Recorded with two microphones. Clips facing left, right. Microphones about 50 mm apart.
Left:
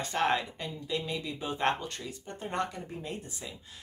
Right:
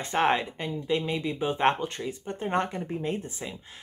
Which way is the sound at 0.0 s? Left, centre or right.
Right.